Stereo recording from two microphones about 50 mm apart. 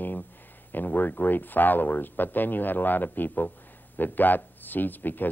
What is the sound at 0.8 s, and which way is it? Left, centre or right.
Speech, left.